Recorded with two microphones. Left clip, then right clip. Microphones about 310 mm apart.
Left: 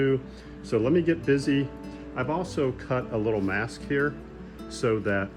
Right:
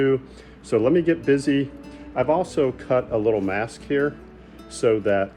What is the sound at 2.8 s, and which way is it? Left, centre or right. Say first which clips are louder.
Speech: right 8 dB; right.